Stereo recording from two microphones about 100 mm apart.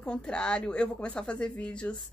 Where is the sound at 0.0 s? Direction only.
10° left (ahead or behind).